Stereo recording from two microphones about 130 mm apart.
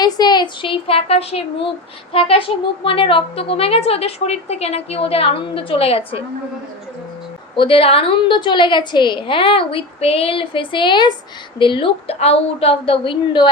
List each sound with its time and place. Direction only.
0.0 s speech: 30° left (ahead or behind)
7.5 s a woman's voice: 40° left (ahead or behind)